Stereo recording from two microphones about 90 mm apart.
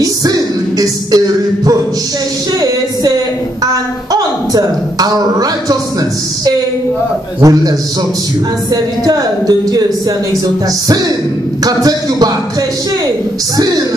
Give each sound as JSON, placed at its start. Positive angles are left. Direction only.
{"t": 0.0, "sound": "music", "side_deg": -40}
{"t": 4.1, "sound": "a woman's voice", "side_deg": -45}
{"t": 7.3, "sound": "a man's voice", "side_deg": -40}
{"t": 9.0, "sound": "a woman's voice", "side_deg": -45}
{"t": 11.6, "sound": "a woman's voice", "side_deg": -45}